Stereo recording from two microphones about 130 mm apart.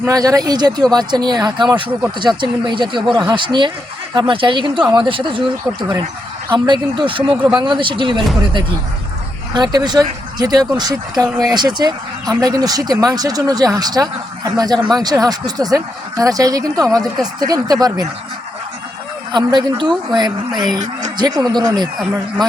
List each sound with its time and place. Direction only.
0.1 s speech: 25° right (ahead or behind)
6.5 s speech: 40° right (ahead or behind)
9.5 s speech: 35° right (ahead or behind)
19.3 s speech: 35° right (ahead or behind)